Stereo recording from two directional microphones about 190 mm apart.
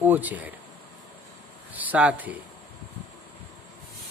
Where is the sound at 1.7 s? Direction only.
10° right (ahead or behind).